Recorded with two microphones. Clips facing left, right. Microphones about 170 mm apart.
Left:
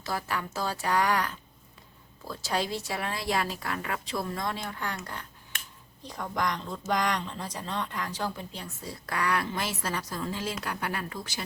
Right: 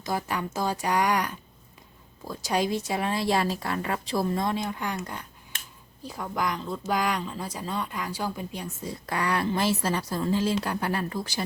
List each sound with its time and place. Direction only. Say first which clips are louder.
0.0 s a woman's voice: right 3 dB; 20° right (ahead or behind)
6.0 s a woman's voice: right 1 dB; 5° right (ahead or behind); by 11.4 s 35° right (ahead or behind)